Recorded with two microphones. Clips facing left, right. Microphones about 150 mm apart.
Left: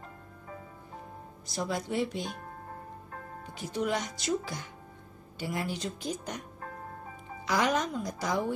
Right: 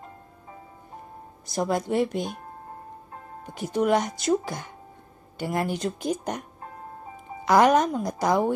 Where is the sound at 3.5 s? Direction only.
55° right (ahead or behind).